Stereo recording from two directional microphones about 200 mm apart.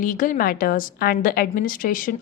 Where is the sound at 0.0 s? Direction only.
45° left (ahead or behind).